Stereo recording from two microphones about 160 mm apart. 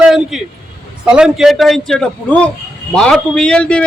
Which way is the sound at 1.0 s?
5° right (ahead or behind).